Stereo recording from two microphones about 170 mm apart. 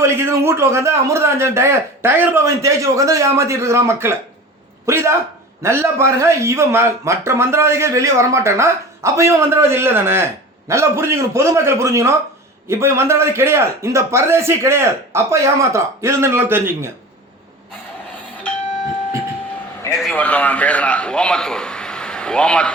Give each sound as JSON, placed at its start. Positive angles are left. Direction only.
{"t": 0.0, "sound": "a man's voice", "side_deg": -15}
{"t": 20.0, "sound": "a man's voice", "side_deg": 5}